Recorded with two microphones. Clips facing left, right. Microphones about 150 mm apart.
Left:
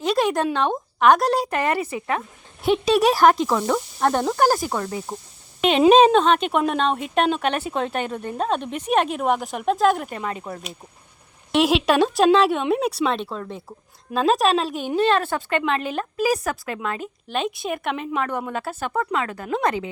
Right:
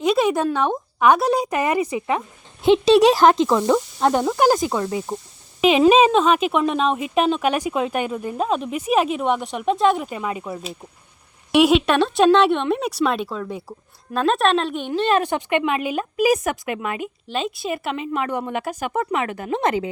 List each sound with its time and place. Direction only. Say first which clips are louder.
0.0 s a sound: right 2 dB; 10° right (ahead or behind)
0.9 s speech: even; 10° right (ahead or behind)
5.5 s a woman's voice: even; 5° right (ahead or behind)
10.1 s speech: right 2 dB; 10° right (ahead or behind)
11.5 s a woman's voice: right 3 dB; centre (ahead or behind)
15.2 s speech: right 3 dB; 15° right (ahead or behind)
17.3 s speech: even; centre (ahead or behind); by 19.9 s 25° right (ahead or behind)